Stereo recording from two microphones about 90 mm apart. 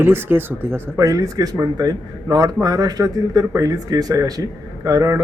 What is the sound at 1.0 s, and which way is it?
Speech, 40° right (ahead or behind).